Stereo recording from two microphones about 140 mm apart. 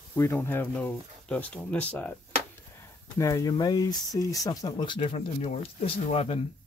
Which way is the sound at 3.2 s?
20° left (ahead or behind).